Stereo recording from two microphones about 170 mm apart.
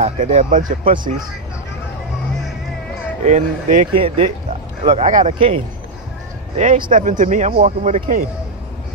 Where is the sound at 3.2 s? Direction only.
45° right (ahead or behind).